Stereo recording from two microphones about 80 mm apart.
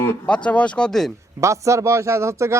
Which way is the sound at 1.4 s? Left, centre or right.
Right.